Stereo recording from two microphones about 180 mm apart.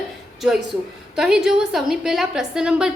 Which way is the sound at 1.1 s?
5° right (ahead or behind).